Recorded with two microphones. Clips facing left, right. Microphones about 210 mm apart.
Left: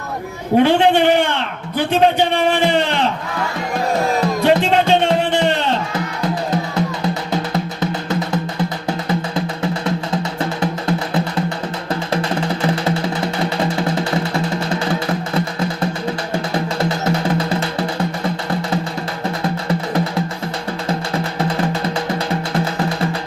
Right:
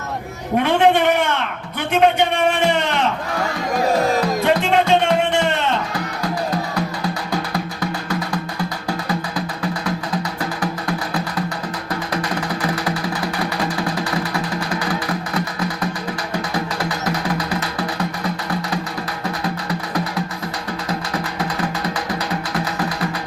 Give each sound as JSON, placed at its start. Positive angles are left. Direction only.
{"t": 0.5, "sound": "a man's voice", "side_deg": 30}
{"t": 4.4, "sound": "music", "side_deg": 30}
{"t": 10.6, "sound": "music", "side_deg": 25}